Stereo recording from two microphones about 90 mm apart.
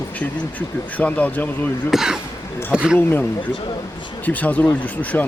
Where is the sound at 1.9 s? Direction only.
5° right (ahead or behind).